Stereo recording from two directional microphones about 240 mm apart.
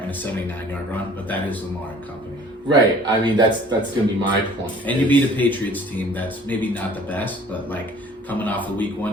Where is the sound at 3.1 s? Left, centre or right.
Centre.